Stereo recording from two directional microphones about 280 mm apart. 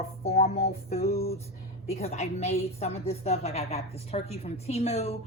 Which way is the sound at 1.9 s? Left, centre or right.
Left.